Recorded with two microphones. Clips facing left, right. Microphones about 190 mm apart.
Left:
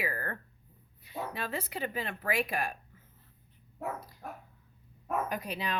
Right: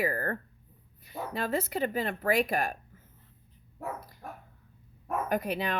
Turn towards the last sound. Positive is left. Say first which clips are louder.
# right 5 dB
turn(degrees=-50)  # may be behind; listen again after turning